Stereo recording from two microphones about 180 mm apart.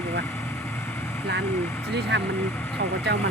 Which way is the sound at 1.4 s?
10° left (ahead or behind).